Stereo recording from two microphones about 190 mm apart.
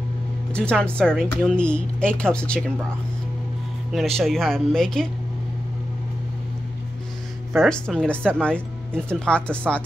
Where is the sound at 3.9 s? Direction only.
Centre (ahead or behind).